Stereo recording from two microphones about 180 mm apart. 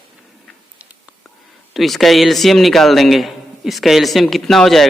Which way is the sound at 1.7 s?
Centre (ahead or behind).